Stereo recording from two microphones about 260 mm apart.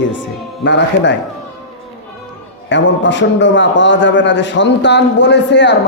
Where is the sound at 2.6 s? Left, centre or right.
Left.